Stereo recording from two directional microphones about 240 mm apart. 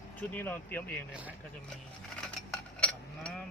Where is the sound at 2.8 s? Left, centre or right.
Centre.